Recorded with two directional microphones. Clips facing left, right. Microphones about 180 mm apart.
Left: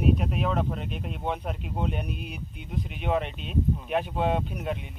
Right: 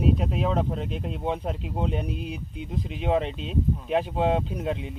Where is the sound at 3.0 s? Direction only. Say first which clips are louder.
Right 3 dB; 30° right (ahead or behind).